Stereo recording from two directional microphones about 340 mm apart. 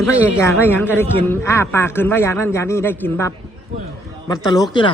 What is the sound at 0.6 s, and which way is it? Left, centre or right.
A man's voice, centre.